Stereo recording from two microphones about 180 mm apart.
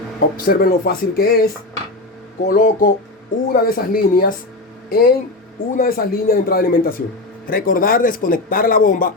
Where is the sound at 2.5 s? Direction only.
50° left (ahead or behind).